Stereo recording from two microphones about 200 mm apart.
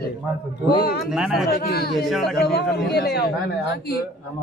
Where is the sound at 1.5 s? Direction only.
50° left (ahead or behind).